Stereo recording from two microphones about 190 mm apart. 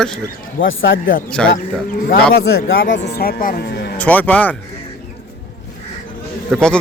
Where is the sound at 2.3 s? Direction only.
55° left (ahead or behind).